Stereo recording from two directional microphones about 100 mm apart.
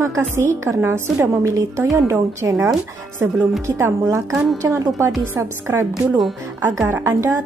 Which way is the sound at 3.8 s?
25° right (ahead or behind).